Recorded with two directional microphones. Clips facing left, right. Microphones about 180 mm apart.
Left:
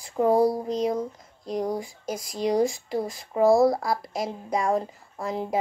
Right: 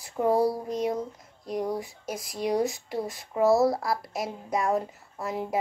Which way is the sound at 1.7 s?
5° right (ahead or behind).